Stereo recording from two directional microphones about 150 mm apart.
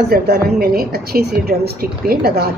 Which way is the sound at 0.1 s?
90° right.